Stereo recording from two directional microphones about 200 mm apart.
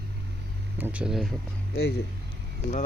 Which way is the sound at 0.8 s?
10° right (ahead or behind).